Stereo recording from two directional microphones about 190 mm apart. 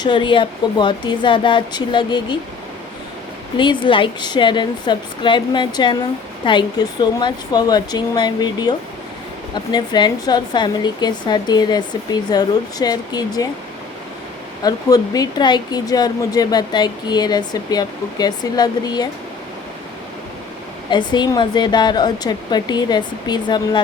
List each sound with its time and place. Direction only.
0.0 s speech: 25° left (ahead or behind)
3.6 s speech: 25° left (ahead or behind)
9.7 s speech: 20° left (ahead or behind)
14.6 s speech: 20° left (ahead or behind)
20.9 s speech: 25° left (ahead or behind)